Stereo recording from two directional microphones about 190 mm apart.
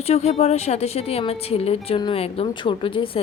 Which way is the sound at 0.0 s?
35° left (ahead or behind).